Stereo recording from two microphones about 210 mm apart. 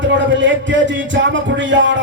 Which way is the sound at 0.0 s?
60° right (ahead or behind).